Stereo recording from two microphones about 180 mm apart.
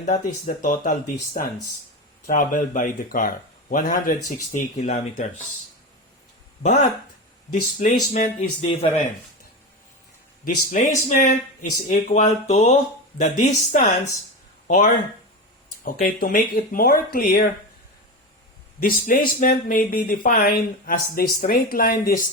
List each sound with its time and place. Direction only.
0.0 s speech: 40° left (ahead or behind)
2.2 s speech: 45° left (ahead or behind)
4.5 s speech: 40° left (ahead or behind)
7.5 s speech: 45° left (ahead or behind)
10.4 s speech: 45° left (ahead or behind)
18.8 s speech: 50° left (ahead or behind)